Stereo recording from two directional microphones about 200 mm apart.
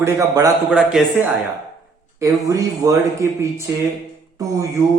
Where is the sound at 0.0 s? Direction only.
15° right (ahead or behind).